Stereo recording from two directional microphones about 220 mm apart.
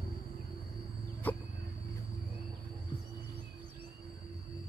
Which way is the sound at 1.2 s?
10° left (ahead or behind).